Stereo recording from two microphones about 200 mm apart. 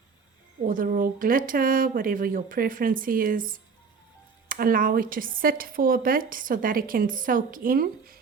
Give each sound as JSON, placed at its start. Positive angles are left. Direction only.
{"t": 0.6, "sound": "speech", "side_deg": -45}